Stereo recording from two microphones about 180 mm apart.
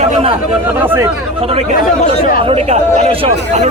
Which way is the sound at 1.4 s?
30° right (ahead or behind).